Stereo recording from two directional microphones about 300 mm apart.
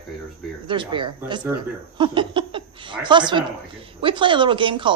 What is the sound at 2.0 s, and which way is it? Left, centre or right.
Laughter, centre.